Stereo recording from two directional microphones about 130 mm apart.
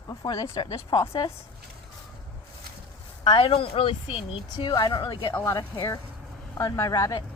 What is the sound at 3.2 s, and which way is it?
A woman's voice, 45° left (ahead or behind).